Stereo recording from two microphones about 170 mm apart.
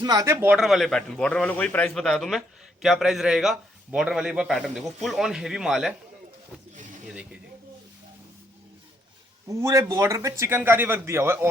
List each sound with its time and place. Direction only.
0.0 s speech: 20° right (ahead or behind)
0.5 s a man's voice: centre (ahead or behind)
9.5 s a man's voice: 20° right (ahead or behind)